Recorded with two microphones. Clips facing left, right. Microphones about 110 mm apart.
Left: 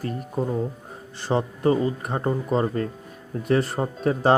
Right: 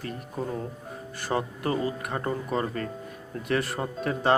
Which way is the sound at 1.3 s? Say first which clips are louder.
Left 6 dB; 30° left (ahead or behind).